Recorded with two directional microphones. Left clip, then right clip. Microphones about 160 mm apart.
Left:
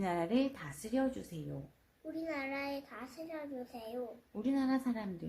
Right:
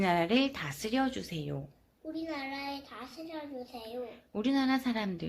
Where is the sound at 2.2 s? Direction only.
15° left (ahead or behind).